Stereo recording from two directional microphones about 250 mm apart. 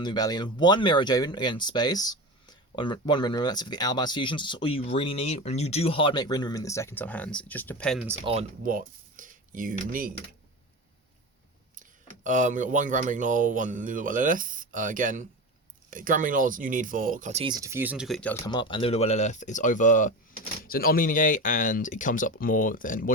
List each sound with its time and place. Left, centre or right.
0.0 s speech: centre
8.2 s speech: right
11.8 s speech: right; by 18.3 s centre
18.4 s speech: centre